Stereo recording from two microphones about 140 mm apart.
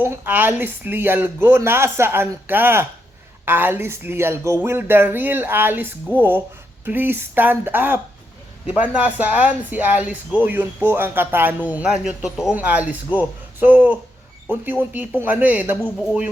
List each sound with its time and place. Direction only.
0.0 s speech: 15° right (ahead or behind)